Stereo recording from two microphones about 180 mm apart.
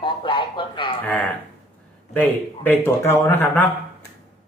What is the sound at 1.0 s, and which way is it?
Speech, 10° left (ahead or behind).